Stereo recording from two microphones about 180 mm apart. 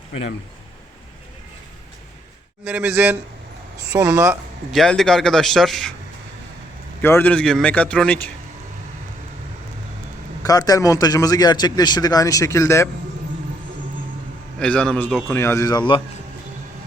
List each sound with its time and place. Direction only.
2.6 s a man's voice: 10° right (ahead or behind)
4.7 s speech: centre (ahead or behind)
7.0 s a man's voice: 10° left (ahead or behind)
10.4 s a man's voice: 20° left (ahead or behind)
14.6 s a man's voice: 5° left (ahead or behind); by 16.0 s 25° left (ahead or behind)